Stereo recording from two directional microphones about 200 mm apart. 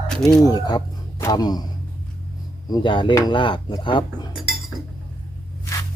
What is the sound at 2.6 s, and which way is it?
Speech, 20° left (ahead or behind).